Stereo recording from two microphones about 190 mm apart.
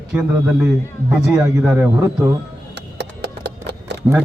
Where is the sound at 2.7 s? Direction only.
65° right (ahead or behind).